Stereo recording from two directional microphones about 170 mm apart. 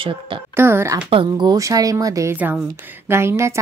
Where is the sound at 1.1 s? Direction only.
30° right (ahead or behind).